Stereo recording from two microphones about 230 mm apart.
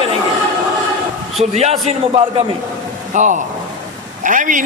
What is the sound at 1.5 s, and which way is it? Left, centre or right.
A man's voice, right.